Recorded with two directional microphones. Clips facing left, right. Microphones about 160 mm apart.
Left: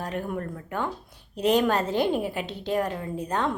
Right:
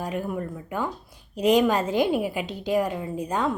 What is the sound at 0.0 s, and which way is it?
Speech, 10° right (ahead or behind).